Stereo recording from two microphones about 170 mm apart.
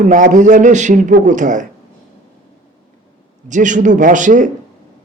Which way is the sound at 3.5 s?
50° right (ahead or behind).